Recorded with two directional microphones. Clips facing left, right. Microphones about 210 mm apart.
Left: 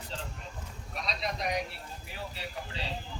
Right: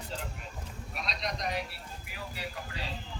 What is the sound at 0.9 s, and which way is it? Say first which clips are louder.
Speech: left 2 dB; centre (ahead or behind).